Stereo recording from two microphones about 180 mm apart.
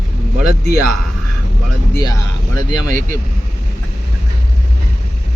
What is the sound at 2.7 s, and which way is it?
Speech, 45° right (ahead or behind).